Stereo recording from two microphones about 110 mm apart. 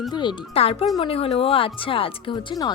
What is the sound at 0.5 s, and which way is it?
Speech, 65° left (ahead or behind).